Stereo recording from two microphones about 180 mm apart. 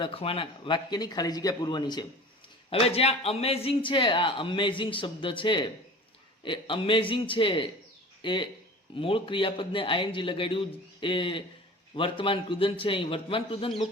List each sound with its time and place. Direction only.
0.0 s speech: 30° left (ahead or behind)
2.6 s speech: 35° left (ahead or behind)